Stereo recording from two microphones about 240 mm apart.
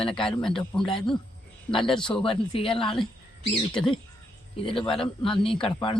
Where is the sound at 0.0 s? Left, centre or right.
Left.